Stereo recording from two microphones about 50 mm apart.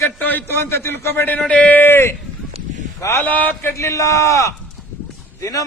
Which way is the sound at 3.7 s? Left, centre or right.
Left.